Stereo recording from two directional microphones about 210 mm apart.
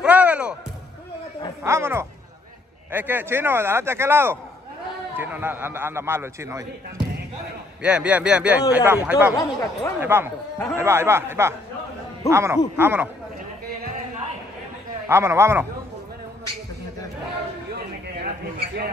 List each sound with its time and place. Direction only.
0.0 s music: 5° right (ahead or behind)
1.6 s a man's voice: 10° right (ahead or behind)
9.4 s speech: 15° left (ahead or behind)
9.9 s a man's voice: 10° right (ahead or behind)
15.0 s a man's voice: 10° right (ahead or behind)
17.7 s a sound: 50° right (ahead or behind)